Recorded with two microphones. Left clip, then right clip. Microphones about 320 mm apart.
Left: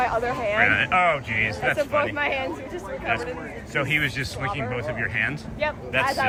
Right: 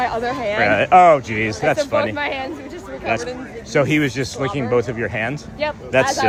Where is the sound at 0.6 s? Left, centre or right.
Centre.